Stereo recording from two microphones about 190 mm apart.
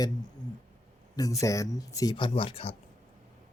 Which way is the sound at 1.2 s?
15° left (ahead or behind).